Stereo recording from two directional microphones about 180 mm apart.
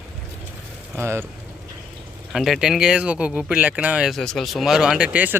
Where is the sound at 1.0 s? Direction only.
15° right (ahead or behind).